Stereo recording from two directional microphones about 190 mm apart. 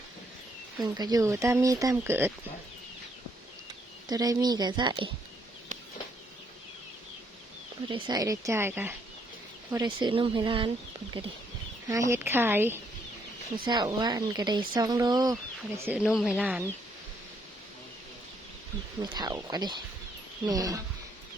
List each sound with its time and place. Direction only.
0.8 s speech: 20° right (ahead or behind)
4.1 s speech: 20° right (ahead or behind)
7.9 s speech: 25° right (ahead or behind)
9.7 s speech: 25° right (ahead or behind)
11.9 s speech: 15° right (ahead or behind)
13.7 s speech: 20° right (ahead or behind)
15.9 s speech: 5° right (ahead or behind)
18.9 s speech: 20° right (ahead or behind)